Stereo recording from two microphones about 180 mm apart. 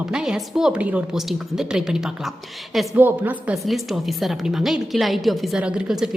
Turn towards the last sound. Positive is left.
turn(degrees=-5)  # may be behind; listen again after turning